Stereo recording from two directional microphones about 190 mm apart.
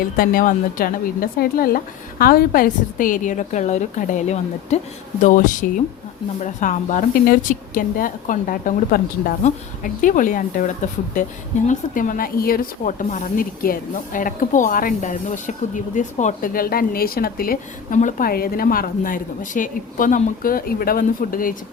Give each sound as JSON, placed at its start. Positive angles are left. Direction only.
{"t": 0.0, "sound": "speech", "side_deg": 50}